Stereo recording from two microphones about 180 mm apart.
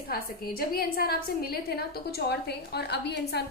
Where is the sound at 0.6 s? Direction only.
55° left (ahead or behind).